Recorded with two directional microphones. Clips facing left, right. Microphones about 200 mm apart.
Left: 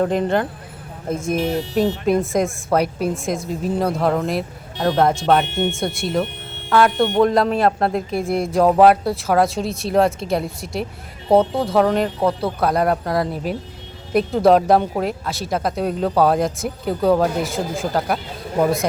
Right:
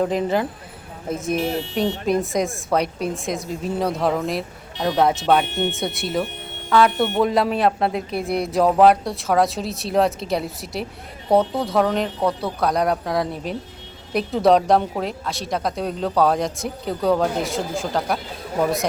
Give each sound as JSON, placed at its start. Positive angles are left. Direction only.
{"t": 0.0, "sound": "speech", "side_deg": 0}
{"t": 1.4, "sound": "speech", "side_deg": 40}
{"t": 2.0, "sound": "speech", "side_deg": 0}